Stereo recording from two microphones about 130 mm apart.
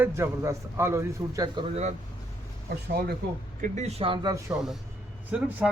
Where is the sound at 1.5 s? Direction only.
45° right (ahead or behind).